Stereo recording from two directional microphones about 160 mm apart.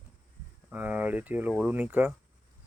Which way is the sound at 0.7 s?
10° right (ahead or behind).